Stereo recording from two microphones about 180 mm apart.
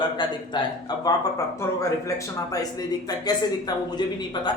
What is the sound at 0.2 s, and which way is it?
Speech, 25° left (ahead or behind).